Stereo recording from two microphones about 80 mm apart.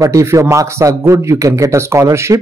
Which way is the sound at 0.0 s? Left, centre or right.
Right.